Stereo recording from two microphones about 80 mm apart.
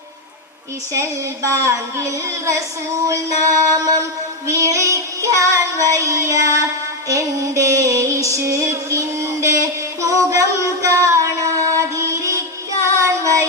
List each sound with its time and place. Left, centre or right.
0.9 s a woman's voice: right
3.1 s music: right
12.8 s child singing: right